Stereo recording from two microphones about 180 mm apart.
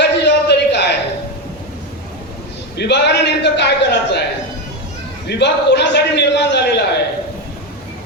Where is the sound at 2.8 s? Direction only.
70° left (ahead or behind).